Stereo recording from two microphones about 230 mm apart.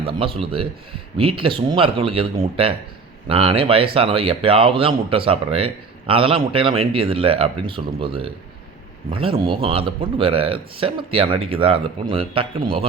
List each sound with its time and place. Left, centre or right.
0.1 s speech: right